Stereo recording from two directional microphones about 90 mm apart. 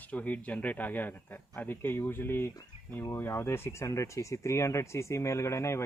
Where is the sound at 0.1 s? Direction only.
15° left (ahead or behind).